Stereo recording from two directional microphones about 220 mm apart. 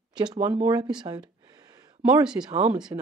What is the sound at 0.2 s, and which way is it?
Speech, 20° right (ahead or behind).